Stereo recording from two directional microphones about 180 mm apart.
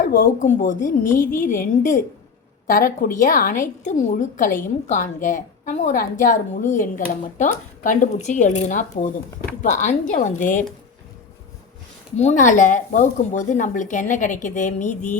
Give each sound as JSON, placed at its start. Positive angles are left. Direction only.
{"t": 0.0, "sound": "speech", "side_deg": 50}
{"t": 1.2, "sound": "a woman's voice", "side_deg": 10}
{"t": 1.5, "sound": "speech", "side_deg": 45}
{"t": 12.1, "sound": "speech", "side_deg": 40}